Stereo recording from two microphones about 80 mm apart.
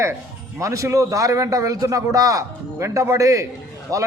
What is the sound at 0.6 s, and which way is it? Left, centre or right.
A man's voice, right.